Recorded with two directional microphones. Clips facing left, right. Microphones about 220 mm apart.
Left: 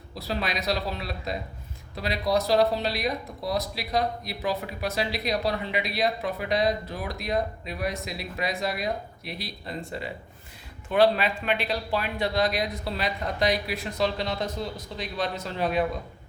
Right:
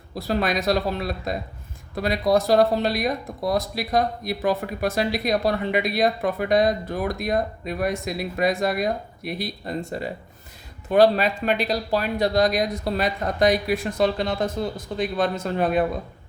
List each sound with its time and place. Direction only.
0.1 s speech: 50° right (ahead or behind)